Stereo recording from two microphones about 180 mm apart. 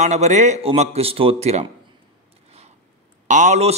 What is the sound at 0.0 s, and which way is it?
A man's voice, 40° right (ahead or behind).